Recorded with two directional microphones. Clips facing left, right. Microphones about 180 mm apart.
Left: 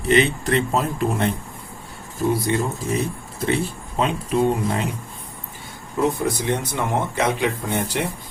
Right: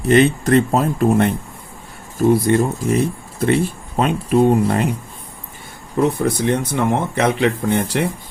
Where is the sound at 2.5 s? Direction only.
55° right (ahead or behind).